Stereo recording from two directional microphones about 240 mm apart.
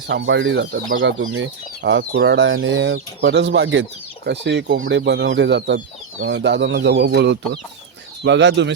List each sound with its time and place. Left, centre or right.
0.1 s speech: right
1.2 s speech: right